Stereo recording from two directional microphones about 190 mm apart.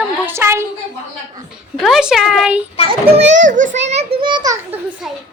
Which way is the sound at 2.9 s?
30° right (ahead or behind).